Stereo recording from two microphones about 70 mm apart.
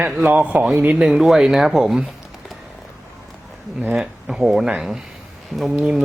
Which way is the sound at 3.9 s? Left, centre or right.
Centre.